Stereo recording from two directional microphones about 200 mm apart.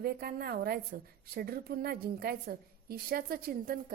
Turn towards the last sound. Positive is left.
turn(degrees=-50)  # may be behind; listen again after turning